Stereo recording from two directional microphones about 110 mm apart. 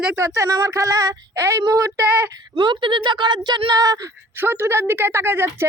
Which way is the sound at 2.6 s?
45° right (ahead or behind).